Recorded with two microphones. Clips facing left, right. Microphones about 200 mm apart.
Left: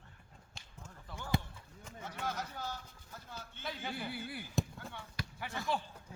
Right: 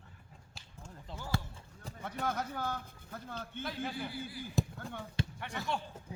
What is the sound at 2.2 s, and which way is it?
Speech, 55° right (ahead or behind).